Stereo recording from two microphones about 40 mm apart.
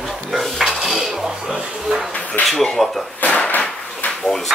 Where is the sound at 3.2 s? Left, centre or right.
Left.